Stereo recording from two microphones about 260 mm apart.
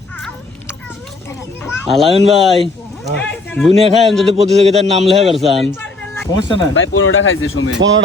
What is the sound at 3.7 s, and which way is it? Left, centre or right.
A man's voice, right.